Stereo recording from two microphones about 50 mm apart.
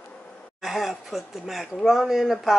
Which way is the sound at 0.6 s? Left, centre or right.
Centre.